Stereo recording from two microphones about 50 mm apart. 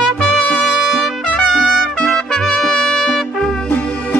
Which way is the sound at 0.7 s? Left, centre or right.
Centre.